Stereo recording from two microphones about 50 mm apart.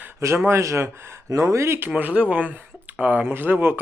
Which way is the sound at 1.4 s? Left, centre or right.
Right.